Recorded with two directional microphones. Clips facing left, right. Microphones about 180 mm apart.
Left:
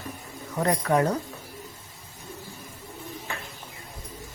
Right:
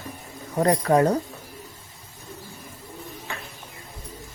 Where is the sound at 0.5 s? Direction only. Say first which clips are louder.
Right 4 dB; 35° right (ahead or behind).